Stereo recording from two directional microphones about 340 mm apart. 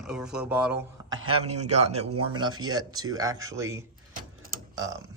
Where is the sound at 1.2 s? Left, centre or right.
Centre.